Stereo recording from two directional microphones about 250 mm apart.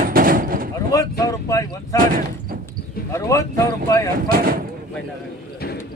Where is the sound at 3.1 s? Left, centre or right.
Centre.